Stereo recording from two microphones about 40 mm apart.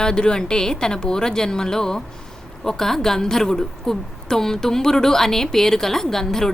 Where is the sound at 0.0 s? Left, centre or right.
Left.